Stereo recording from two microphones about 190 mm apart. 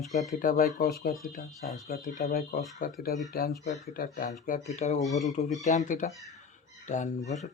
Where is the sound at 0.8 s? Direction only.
50° left (ahead or behind).